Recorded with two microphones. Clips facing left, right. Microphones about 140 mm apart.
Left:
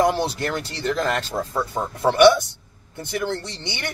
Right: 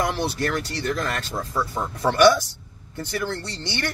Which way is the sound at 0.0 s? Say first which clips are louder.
Left 4 dB; 25° left (ahead or behind).